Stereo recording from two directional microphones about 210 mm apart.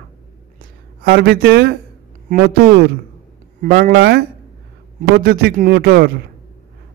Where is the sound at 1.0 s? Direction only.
50° right (ahead or behind).